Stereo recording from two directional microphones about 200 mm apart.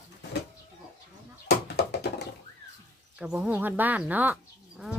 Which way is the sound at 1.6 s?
55° left (ahead or behind).